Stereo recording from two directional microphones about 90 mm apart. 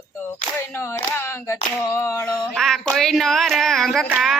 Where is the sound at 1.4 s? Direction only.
35° left (ahead or behind).